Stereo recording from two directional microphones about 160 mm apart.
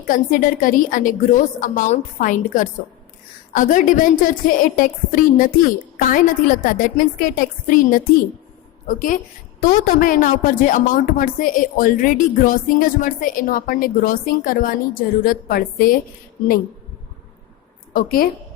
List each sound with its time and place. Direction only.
0.1 s a woman's voice: 60° left (ahead or behind)
17.9 s a woman's voice: 65° left (ahead or behind)